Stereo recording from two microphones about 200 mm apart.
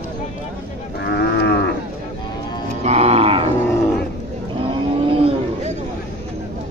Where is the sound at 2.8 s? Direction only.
35° right (ahead or behind).